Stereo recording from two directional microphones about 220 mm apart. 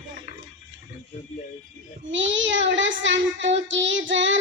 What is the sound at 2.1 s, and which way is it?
Child singing, 55° right (ahead or behind).